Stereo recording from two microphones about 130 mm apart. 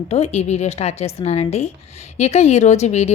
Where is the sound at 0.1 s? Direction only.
55° left (ahead or behind).